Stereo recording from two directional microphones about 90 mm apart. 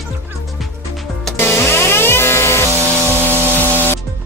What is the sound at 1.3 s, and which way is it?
Music, 25° left (ahead or behind).